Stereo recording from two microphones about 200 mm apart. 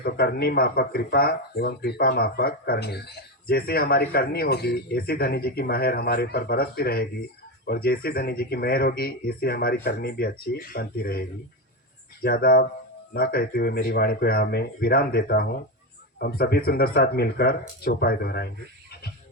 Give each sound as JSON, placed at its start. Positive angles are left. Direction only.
{"t": 0.0, "sound": "speech", "side_deg": 50}